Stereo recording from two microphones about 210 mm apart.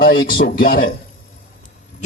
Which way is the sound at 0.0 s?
45° left (ahead or behind).